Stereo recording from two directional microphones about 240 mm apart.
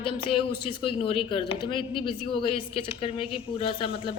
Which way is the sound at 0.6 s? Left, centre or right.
Left.